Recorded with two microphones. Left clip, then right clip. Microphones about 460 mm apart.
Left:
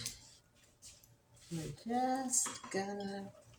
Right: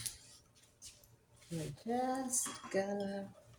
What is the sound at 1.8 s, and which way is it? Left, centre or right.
Dishes, right.